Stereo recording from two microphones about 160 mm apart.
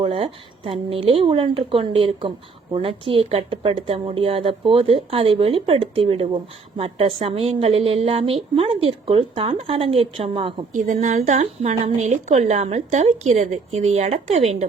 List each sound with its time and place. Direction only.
0.0 s a woman's voice: 35° right (ahead or behind)
10.8 s a woman's voice: 50° right (ahead or behind)